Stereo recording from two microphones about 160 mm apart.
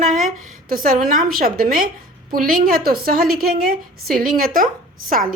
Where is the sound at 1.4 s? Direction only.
65° right (ahead or behind).